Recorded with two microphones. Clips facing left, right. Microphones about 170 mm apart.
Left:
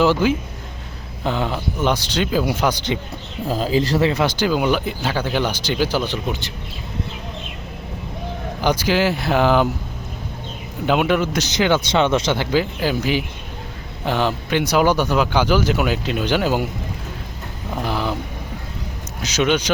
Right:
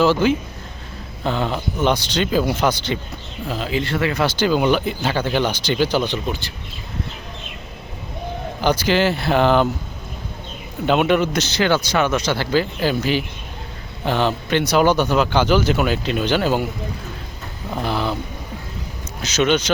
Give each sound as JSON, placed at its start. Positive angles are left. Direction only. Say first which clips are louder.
{"t": 0.0, "sound": "speech", "louder": "even", "side_deg": 10}
{"t": 3.5, "sound": "speech", "louder": "left 4 dB", "side_deg": 40}
{"t": 4.1, "sound": "speech", "louder": "even", "side_deg": 15}
{"t": 8.6, "sound": "speech", "louder": "right 1 dB", "side_deg": 10}
{"t": 10.8, "sound": "speech", "louder": "right 1 dB", "side_deg": 5}
{"t": 11.3, "sound": "a man's voice", "louder": "even", "side_deg": 15}
{"t": 17.8, "sound": "a sound", "louder": "right 1 dB", "side_deg": 10}
{"t": 19.2, "sound": "speech", "louder": "right 1 dB", "side_deg": 10}